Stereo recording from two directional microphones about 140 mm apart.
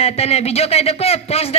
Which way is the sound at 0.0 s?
45° left (ahead or behind).